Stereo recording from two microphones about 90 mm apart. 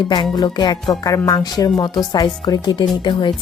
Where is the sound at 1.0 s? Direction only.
40° left (ahead or behind).